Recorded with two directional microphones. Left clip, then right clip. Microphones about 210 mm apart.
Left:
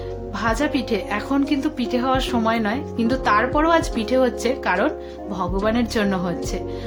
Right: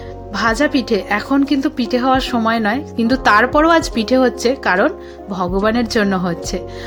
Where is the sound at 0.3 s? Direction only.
25° right (ahead or behind).